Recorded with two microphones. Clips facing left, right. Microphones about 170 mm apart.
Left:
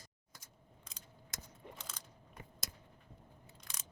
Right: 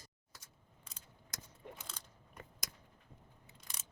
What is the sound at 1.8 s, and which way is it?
Biting, centre (ahead or behind).